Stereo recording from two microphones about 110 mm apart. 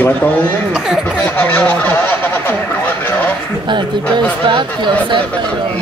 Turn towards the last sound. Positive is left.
turn(degrees=-45)  # may be behind; listen again after turning